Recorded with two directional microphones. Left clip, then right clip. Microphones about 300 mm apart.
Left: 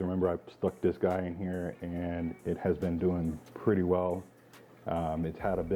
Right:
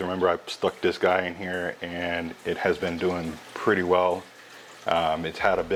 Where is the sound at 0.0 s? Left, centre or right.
Centre.